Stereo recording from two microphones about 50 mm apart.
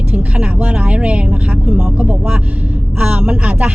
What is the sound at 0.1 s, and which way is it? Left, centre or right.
Speech, right.